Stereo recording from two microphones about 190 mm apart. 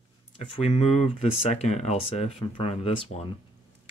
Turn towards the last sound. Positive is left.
turn(degrees=35)  # may be behind; listen again after turning